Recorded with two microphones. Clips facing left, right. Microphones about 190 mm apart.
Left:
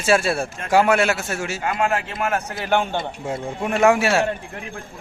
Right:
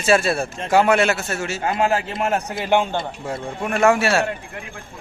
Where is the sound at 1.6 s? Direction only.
35° right (ahead or behind).